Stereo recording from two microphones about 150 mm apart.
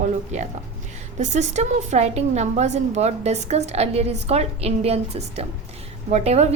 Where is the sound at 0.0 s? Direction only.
50° right (ahead or behind).